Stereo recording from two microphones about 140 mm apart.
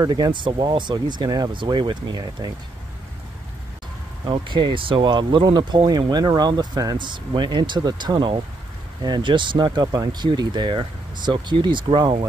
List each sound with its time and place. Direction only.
0.0 s speech: 30° right (ahead or behind)
4.3 s speech: 35° right (ahead or behind)